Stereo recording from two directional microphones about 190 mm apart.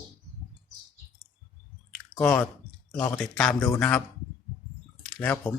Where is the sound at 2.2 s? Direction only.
10° left (ahead or behind).